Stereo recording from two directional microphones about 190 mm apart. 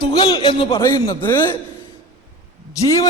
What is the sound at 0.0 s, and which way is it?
A man's voice, 20° left (ahead or behind).